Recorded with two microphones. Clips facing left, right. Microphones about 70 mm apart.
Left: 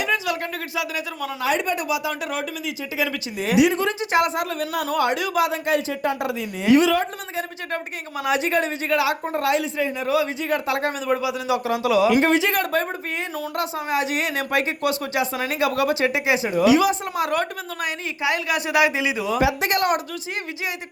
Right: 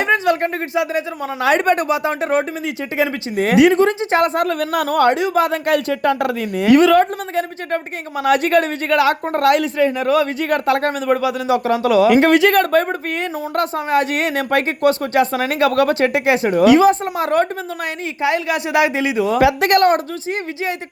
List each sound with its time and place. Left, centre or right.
0.0 s a sound: right
0.7 s speech: right
1.4 s speech: right
3.3 s speech: right
5.6 s a woman's voice: right
12.0 s speech: right
16.8 s speech: right
19.3 s a woman's voice: right